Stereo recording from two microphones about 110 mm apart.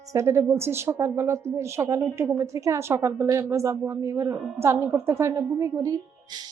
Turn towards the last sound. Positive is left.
turn(degrees=-25)  # may be behind; listen again after turning